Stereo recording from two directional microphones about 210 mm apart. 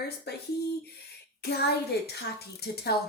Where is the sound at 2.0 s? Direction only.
50° left (ahead or behind).